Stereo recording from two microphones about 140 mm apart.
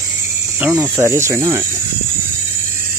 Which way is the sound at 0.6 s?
15° right (ahead or behind).